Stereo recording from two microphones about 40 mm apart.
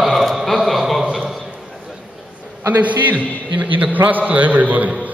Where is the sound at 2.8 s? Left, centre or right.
Right.